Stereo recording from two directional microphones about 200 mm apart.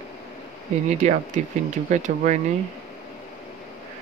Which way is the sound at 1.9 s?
35° right (ahead or behind).